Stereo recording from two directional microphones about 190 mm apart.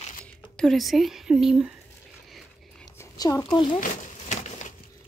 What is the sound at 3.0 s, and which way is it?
Speech, 15° left (ahead or behind).